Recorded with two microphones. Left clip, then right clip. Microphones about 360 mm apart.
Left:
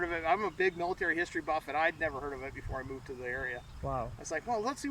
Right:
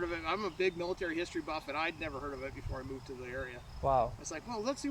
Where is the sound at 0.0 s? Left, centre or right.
Centre.